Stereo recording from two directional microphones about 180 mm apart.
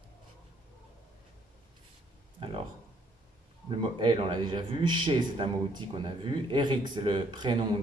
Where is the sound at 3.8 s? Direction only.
30° right (ahead or behind).